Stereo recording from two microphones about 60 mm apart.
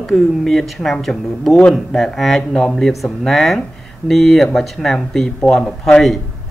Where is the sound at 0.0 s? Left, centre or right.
Centre.